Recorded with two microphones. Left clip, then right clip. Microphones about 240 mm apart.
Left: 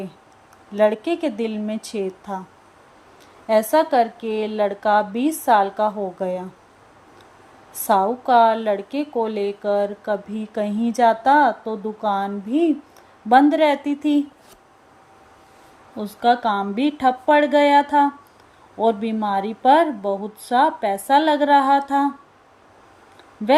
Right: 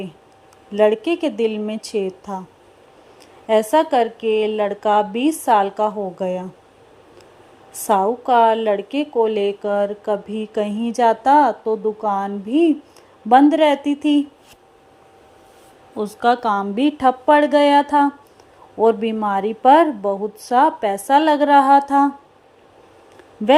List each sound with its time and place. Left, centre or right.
0.7 s a woman's voice: centre
3.4 s a woman's voice: centre
8.3 s a woman's voice: centre
16.0 s a woman's voice: centre